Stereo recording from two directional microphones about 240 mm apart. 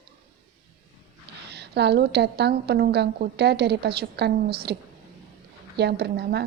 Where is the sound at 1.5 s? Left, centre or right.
Right.